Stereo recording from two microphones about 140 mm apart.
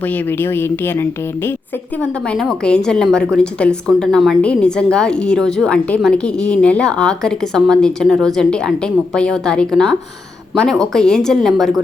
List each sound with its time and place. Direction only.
0.3 s a woman's voice: 15° left (ahead or behind)
2.0 s a woman's voice: 5° left (ahead or behind)